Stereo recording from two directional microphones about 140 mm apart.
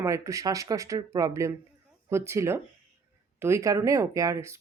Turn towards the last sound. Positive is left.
turn(degrees=-20)  # may be behind; listen again after turning